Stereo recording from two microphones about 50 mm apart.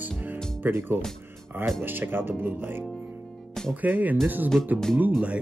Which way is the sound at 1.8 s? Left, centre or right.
Right.